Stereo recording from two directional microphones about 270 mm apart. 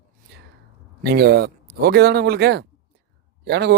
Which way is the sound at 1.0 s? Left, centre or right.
Right.